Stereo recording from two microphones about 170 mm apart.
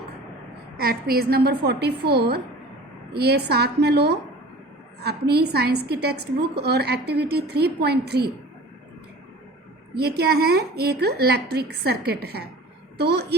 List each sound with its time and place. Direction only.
0.8 s a woman's voice: 65° right (ahead or behind)
9.9 s a woman's voice: 70° right (ahead or behind)